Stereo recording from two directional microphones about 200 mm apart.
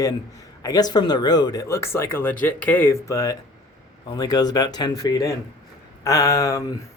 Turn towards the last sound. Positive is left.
turn(degrees=15)  # may be behind; listen again after turning